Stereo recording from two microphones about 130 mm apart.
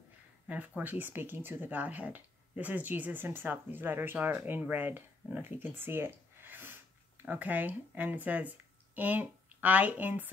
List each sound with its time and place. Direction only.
0.5 s speech: 15° right (ahead or behind)